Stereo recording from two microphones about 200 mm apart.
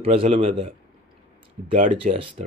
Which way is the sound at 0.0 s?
30° right (ahead or behind).